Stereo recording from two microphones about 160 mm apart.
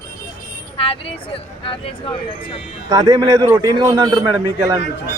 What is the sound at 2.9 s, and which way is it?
A man's voice, 25° right (ahead or behind).